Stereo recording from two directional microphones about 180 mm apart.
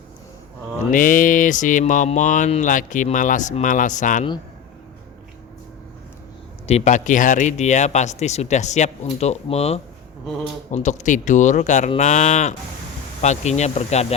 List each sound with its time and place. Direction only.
0.9 s mantra: 50° left (ahead or behind)
6.7 s speech: 40° left (ahead or behind)